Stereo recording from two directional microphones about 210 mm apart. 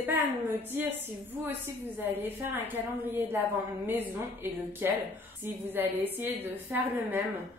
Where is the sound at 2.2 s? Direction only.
10° right (ahead or behind).